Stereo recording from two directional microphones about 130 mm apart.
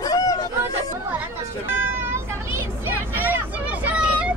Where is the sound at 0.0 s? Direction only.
30° left (ahead or behind).